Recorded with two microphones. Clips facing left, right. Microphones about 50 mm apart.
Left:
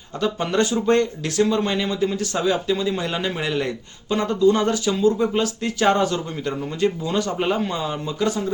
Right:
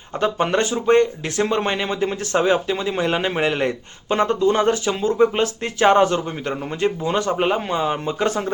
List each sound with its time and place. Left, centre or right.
0.2 s speech: right